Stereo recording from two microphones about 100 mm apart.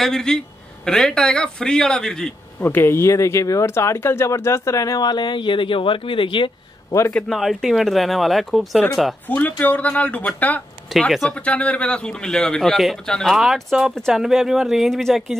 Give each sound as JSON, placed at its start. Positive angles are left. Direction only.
{"t": 0.0, "sound": "a man's voice", "side_deg": 5}
{"t": 2.6, "sound": "speech", "side_deg": 20}
{"t": 7.2, "sound": "speech", "side_deg": 0}
{"t": 9.3, "sound": "a man's voice", "side_deg": 15}
{"t": 10.9, "sound": "speech", "side_deg": 0}